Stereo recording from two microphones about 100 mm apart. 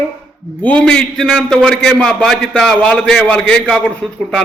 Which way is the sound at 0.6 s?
15° left (ahead or behind).